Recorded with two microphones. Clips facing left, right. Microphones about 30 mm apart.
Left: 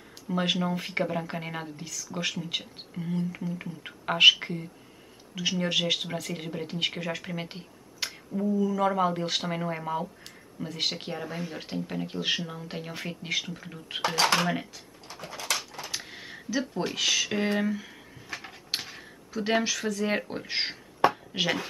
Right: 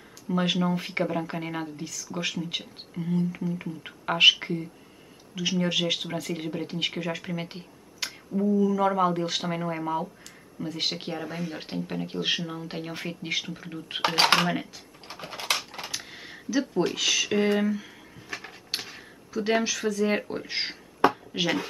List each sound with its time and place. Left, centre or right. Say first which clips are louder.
0.3 s speech: right 2 dB; centre
15.0 s dog: right 4 dB; right
15.9 s a sound: even; centre